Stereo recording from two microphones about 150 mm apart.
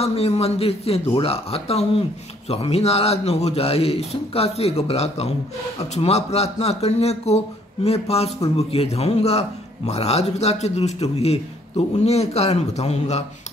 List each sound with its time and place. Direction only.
0.0 s speech: 40° left (ahead or behind)